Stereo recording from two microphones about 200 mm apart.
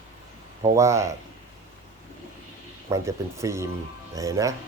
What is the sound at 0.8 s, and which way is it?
Speech, 15° right (ahead or behind).